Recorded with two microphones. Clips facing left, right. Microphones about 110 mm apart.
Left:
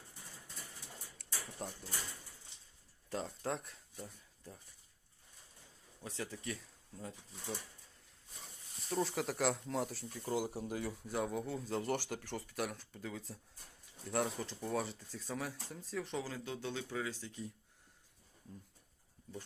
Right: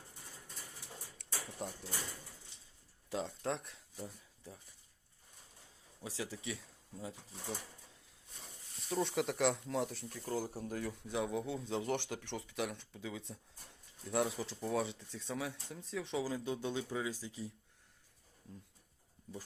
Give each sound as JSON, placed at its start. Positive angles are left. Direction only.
{"t": 1.2, "sound": "a sound", "side_deg": 0}
{"t": 3.1, "sound": "speech", "side_deg": 0}
{"t": 6.0, "sound": "speech", "side_deg": 0}
{"t": 8.9, "sound": "speech", "side_deg": 0}
{"t": 16.3, "sound": "speech", "side_deg": -15}